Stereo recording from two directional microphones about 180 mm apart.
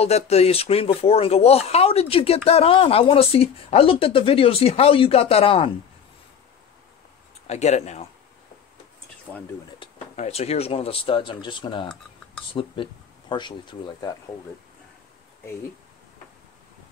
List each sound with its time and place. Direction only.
0.0 s speech: 35° left (ahead or behind)
7.4 s speech: 40° left (ahead or behind)
9.3 s speech: centre (ahead or behind)
9.8 s speech: 35° left (ahead or behind)